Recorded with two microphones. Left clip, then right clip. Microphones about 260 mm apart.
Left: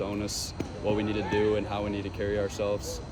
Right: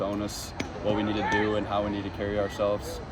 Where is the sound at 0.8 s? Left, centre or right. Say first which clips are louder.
Right 1 dB; centre.